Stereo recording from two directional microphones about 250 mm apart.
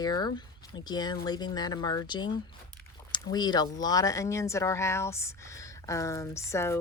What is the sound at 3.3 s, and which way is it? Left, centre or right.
Speech, centre.